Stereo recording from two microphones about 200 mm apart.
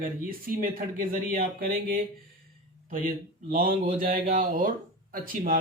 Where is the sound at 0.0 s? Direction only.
45° right (ahead or behind).